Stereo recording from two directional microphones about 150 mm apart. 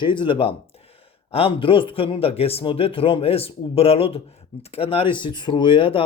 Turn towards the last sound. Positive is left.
turn(degrees=35)  # may be behind; listen again after turning